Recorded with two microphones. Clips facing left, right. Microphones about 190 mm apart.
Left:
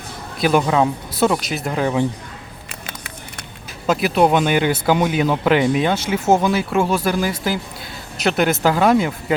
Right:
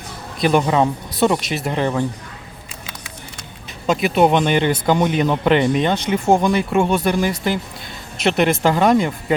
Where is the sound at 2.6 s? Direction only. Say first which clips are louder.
Left 2 dB; 60° left (ahead or behind).